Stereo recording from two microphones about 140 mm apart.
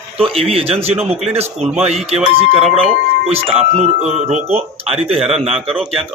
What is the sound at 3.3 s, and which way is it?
Speech, 50° right (ahead or behind).